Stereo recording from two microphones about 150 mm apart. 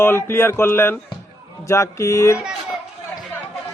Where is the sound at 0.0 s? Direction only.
15° left (ahead or behind).